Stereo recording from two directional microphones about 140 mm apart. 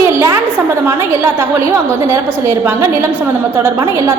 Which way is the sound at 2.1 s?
20° right (ahead or behind).